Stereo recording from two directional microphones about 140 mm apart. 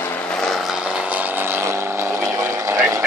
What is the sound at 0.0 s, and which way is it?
Vehicle, 10° left (ahead or behind).